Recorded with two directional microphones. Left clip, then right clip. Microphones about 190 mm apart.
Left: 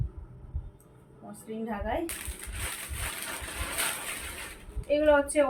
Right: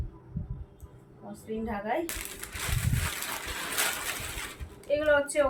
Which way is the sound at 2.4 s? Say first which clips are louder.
Right 3 dB; 30° right (ahead or behind).